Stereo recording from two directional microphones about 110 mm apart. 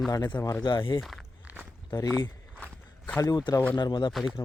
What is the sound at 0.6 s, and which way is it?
Speech, 50° left (ahead or behind).